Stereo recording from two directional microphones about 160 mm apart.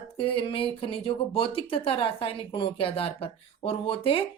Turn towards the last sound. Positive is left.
turn(degrees=35)  # may be behind; listen again after turning